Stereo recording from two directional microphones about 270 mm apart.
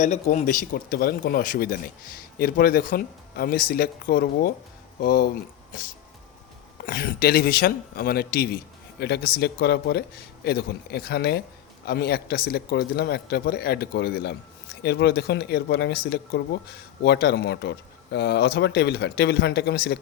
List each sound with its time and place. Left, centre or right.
0.0 s speech: left
6.8 s speech: left